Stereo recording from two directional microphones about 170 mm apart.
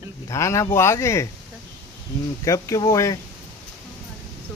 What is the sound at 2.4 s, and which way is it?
Speech, 20° left (ahead or behind).